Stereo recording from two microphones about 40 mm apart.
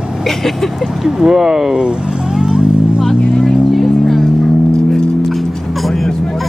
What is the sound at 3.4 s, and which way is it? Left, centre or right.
Vehicle, centre.